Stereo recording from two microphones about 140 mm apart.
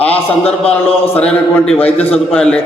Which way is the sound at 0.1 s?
45° left (ahead or behind).